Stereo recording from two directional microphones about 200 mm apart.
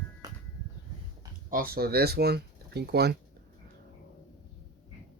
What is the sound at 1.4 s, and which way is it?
Speech, 45° right (ahead or behind).